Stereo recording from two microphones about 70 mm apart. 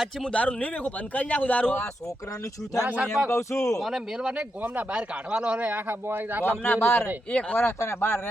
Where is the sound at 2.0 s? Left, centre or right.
Left.